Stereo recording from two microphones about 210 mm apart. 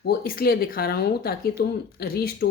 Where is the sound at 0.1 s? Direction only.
45° left (ahead or behind).